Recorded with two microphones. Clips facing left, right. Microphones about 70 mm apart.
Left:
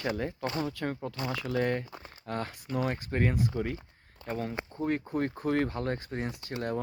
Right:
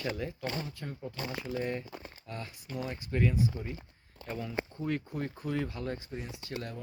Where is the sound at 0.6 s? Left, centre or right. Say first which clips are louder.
Left 8 dB; left.